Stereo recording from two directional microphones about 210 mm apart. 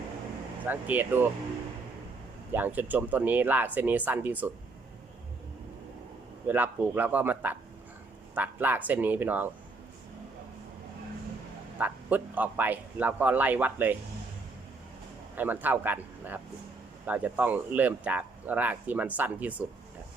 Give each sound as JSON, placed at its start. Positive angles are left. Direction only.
{"t": 0.6, "sound": "speech", "side_deg": -10}
{"t": 2.5, "sound": "speech", "side_deg": -10}
{"t": 6.5, "sound": "speech", "side_deg": -10}
{"t": 11.8, "sound": "speech", "side_deg": -10}
{"t": 15.4, "sound": "speech", "side_deg": -10}